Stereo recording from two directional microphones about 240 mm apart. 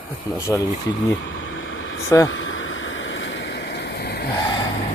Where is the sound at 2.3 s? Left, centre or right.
Left.